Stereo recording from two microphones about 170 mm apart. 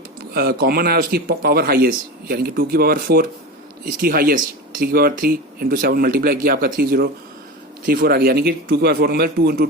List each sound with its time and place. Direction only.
0.3 s speech: 65° right (ahead or behind)